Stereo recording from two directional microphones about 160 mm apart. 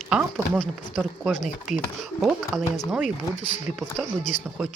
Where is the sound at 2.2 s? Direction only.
Centre (ahead or behind).